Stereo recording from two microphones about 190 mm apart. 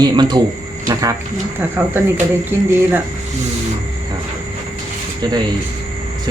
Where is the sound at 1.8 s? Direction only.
15° right (ahead or behind).